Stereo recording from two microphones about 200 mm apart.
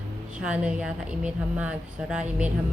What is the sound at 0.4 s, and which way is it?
A woman's voice, 5° right (ahead or behind).